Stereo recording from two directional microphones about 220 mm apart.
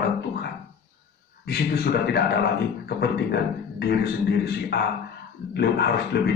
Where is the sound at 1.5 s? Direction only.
45° left (ahead or behind).